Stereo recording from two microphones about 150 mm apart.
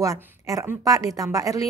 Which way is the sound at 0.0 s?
20° right (ahead or behind).